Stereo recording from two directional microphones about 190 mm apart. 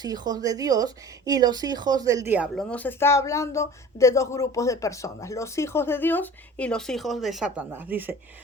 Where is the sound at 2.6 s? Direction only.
5° left (ahead or behind); by 8.1 s 10° right (ahead or behind).